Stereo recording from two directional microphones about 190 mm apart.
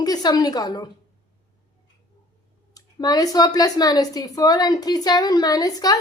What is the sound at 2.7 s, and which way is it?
Speech, 20° left (ahead or behind).